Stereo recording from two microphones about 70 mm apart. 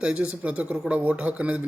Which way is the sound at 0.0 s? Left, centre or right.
Centre.